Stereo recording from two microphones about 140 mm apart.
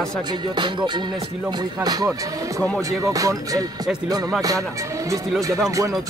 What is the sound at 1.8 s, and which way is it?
Speech, 30° right (ahead or behind).